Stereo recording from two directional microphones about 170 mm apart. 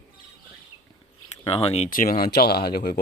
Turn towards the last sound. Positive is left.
turn(degrees=65)  # may be behind; listen again after turning